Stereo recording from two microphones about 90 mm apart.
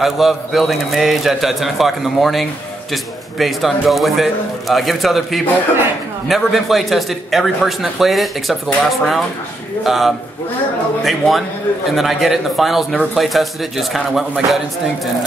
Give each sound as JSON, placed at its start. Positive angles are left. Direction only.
{"t": 0.0, "sound": "a man's voice", "side_deg": -5}